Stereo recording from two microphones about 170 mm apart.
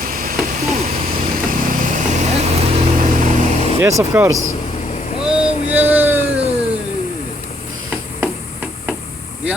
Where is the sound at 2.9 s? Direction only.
55° right (ahead or behind).